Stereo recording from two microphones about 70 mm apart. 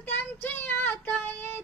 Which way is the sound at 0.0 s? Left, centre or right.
Left.